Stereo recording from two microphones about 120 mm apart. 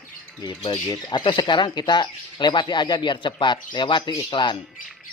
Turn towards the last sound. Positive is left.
turn(degrees=40)  # may be behind; listen again after turning